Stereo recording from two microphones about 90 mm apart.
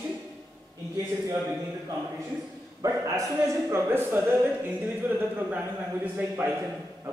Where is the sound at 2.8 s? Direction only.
35° right (ahead or behind).